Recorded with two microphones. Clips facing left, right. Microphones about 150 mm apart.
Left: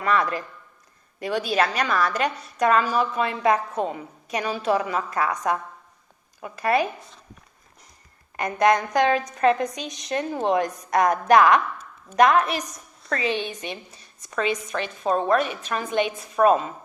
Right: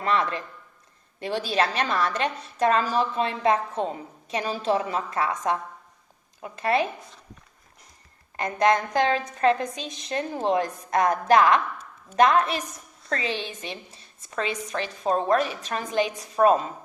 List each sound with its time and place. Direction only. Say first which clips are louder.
0.0 s a woman's voice: left 2 dB; 30° right (ahead or behind)
8.4 s a woman's voice: left 2 dB; 30° right (ahead or behind)